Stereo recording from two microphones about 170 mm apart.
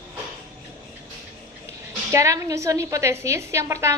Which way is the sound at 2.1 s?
20° right (ahead or behind).